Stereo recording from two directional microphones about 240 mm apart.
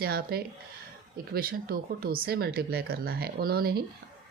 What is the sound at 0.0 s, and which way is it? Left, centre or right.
Speech, right.